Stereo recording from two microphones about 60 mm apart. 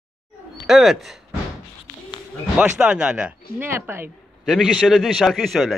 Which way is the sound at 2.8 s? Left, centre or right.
Centre.